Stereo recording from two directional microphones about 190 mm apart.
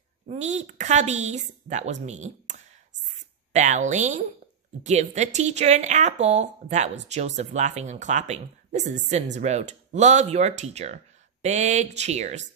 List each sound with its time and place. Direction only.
0.3 s a woman's voice: 35° right (ahead or behind)